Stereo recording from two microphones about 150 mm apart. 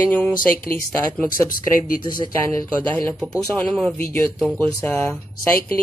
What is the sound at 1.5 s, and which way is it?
Speech, 65° left (ahead or behind).